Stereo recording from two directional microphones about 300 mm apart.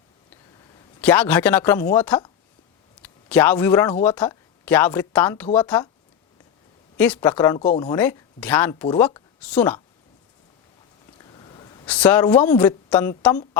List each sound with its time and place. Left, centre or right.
1.0 s a woman's voice: centre
6.9 s a woman's voice: centre
11.3 s a sound: centre
11.9 s a woman's voice: centre